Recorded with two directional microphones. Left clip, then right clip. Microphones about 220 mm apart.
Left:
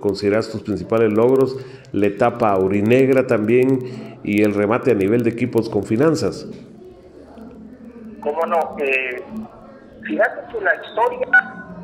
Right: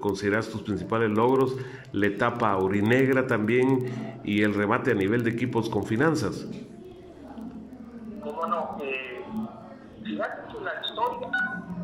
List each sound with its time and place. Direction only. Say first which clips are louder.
0.0 s a man's voice: left 8 dB; 5° left (ahead or behind)
8.2 s a sound: left 10 dB; 15° left (ahead or behind)
10.1 s speech: left 13 dB; 20° left (ahead or behind)